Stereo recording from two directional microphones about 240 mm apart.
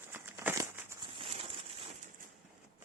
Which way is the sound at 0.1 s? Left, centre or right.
Centre.